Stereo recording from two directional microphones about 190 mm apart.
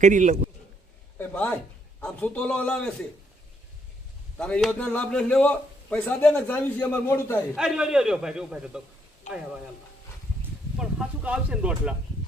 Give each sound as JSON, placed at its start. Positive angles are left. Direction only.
{"t": 0.0, "sound": "a man's voice", "side_deg": -40}
{"t": 1.2, "sound": "a man's voice", "side_deg": 10}
{"t": 4.4, "sound": "a man's voice", "side_deg": 5}
{"t": 7.5, "sound": "a man's voice", "side_deg": -5}
{"t": 9.3, "sound": "speech", "side_deg": 40}
{"t": 10.8, "sound": "speech", "side_deg": -5}